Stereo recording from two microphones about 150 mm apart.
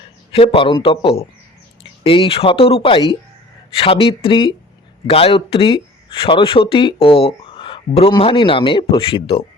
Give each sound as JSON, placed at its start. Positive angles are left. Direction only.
{"t": 0.3, "sound": "speech", "side_deg": 35}